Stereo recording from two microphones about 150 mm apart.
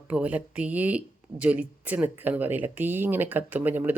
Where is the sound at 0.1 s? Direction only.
10° right (ahead or behind).